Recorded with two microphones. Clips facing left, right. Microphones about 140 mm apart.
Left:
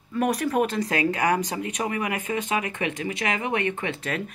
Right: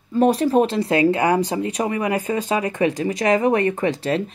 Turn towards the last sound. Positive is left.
turn(degrees=-30)  # may be behind; listen again after turning